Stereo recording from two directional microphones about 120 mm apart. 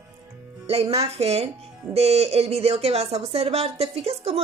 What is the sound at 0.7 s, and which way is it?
Speech, 60° right (ahead or behind).